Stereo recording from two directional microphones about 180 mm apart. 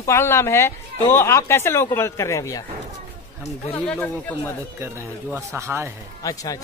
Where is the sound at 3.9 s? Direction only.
10° left (ahead or behind).